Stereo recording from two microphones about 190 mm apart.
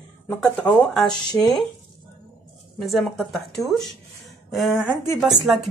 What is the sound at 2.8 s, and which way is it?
Speech, centre (ahead or behind).